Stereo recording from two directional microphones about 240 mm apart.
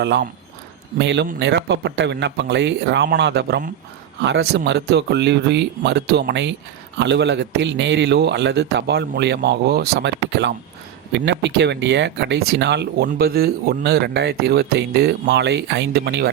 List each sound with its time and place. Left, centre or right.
0.0 s speech: right